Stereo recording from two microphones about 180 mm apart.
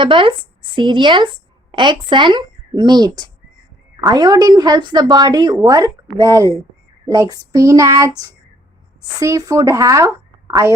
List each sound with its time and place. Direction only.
0.0 s a woman's voice: 30° right (ahead or behind)
7.1 s child singing: 20° right (ahead or behind)
9.2 s a woman's voice: 20° right (ahead or behind)